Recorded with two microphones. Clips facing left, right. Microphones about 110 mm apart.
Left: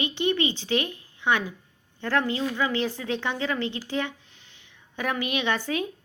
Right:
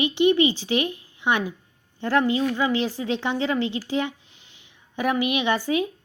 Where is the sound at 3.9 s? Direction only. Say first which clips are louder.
Right 4 dB; 15° right (ahead or behind).